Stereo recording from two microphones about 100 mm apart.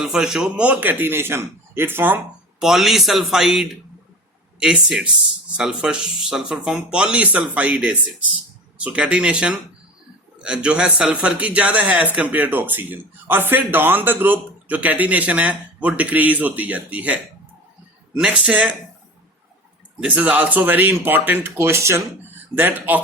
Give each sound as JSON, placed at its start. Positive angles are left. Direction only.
{"t": 0.0, "sound": "a man's voice", "side_deg": -5}
{"t": 2.6, "sound": "a man's voice", "side_deg": -5}
{"t": 20.0, "sound": "a man's voice", "side_deg": -15}